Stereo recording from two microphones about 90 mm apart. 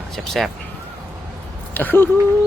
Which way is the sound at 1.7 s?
20° left (ahead or behind).